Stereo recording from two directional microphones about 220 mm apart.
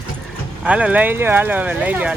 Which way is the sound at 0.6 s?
5° right (ahead or behind).